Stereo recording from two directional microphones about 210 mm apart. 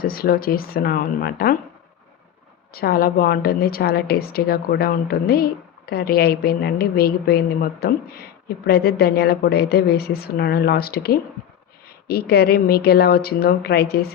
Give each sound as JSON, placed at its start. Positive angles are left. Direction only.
{"t": 0.0, "sound": "a woman's voice", "side_deg": 45}
{"t": 2.7, "sound": "a woman's voice", "side_deg": 45}